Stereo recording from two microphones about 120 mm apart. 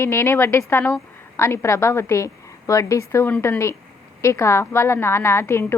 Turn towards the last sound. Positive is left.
turn(degrees=20)  # may be behind; listen again after turning